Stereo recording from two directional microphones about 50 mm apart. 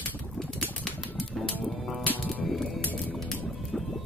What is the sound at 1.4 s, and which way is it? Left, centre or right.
Music, centre.